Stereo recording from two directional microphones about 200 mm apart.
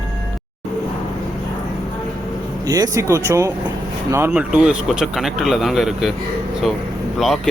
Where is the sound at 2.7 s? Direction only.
20° right (ahead or behind); by 6.1 s centre (ahead or behind).